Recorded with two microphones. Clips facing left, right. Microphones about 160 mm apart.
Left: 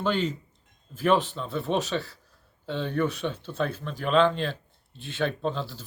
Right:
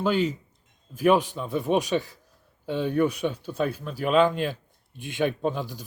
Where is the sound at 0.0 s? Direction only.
10° right (ahead or behind).